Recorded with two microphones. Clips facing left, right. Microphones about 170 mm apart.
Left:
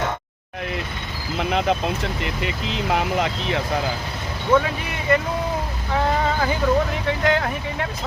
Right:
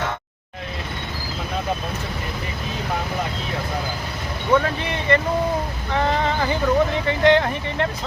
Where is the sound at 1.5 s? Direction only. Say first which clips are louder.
Left 6 dB; 80° left.